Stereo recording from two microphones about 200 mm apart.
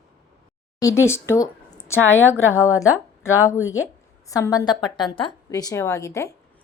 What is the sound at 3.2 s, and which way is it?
Speech, 15° left (ahead or behind).